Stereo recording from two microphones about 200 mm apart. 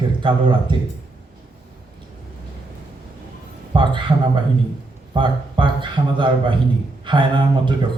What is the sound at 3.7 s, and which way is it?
Speech, 25° right (ahead or behind).